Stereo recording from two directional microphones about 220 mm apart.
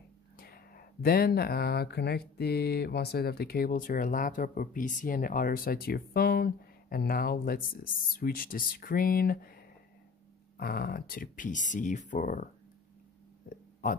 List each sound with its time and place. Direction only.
0.4 s speech: 45° left (ahead or behind)